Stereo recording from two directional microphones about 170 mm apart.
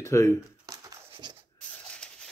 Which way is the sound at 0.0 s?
15° left (ahead or behind).